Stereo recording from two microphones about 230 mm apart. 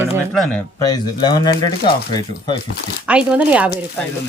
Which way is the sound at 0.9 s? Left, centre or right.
Centre.